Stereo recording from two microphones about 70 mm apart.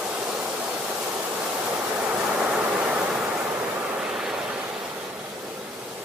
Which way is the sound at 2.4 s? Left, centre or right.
Centre.